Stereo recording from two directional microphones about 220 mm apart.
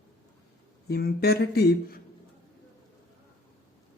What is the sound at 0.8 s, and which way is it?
Speech, 45° left (ahead or behind).